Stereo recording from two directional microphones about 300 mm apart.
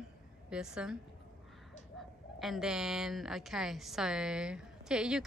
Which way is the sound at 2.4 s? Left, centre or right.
Centre.